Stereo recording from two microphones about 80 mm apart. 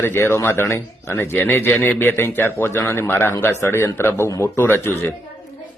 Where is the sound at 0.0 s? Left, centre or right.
Left.